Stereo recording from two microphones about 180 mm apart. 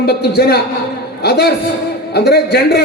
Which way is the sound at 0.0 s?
65° left (ahead or behind).